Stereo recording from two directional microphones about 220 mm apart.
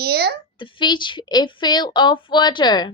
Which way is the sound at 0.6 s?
20° left (ahead or behind).